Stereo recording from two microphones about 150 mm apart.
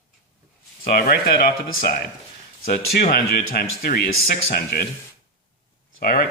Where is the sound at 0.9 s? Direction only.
85° left.